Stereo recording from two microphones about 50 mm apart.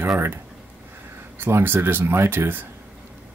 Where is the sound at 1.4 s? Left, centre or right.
Right.